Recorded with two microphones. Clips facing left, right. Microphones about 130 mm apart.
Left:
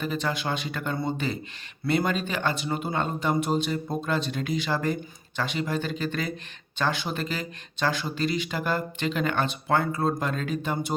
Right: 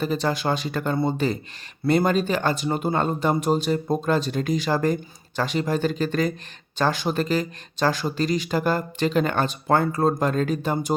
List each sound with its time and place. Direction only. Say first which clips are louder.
0.0 s speech: right 5 dB; 35° right (ahead or behind)